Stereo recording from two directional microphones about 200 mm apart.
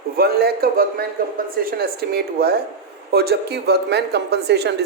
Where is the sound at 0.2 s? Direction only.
50° right (ahead or behind).